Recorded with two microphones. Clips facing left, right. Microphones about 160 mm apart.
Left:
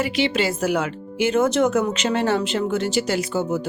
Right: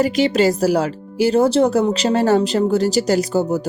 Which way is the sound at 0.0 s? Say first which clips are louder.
Right 6 dB; 40° right (ahead or behind).